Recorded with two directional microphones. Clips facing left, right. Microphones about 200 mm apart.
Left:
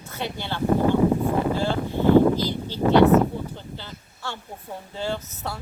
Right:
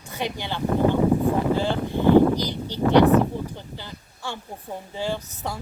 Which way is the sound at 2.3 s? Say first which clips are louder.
Left 1 dB; 15° right (ahead or behind).